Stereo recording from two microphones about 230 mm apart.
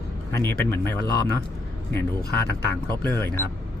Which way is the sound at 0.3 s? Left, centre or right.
Centre.